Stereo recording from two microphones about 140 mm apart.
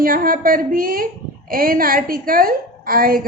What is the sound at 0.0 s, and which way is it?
A woman's voice, 90° right.